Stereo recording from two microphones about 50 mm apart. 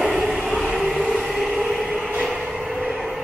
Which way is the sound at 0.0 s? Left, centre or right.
Centre.